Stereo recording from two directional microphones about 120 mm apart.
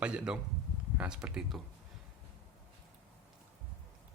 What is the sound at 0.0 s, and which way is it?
Speech, 10° right (ahead or behind).